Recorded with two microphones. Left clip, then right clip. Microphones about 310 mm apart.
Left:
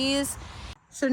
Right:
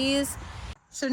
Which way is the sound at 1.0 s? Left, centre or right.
Centre.